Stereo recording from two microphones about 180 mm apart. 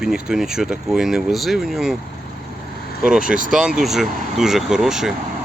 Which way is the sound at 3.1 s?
5° right (ahead or behind).